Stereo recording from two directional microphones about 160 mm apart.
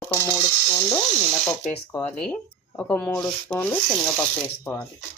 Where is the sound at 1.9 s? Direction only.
10° left (ahead or behind).